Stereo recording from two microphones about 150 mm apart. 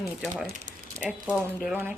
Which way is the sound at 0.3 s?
15° right (ahead or behind).